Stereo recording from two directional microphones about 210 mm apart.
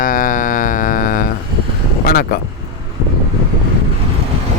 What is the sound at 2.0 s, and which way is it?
Vehicle, 45° left (ahead or behind).